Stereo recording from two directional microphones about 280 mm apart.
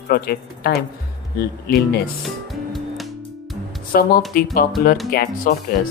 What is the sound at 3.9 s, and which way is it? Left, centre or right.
Speech, left.